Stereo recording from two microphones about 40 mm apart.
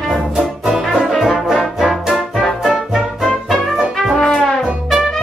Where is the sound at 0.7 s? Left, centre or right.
Centre.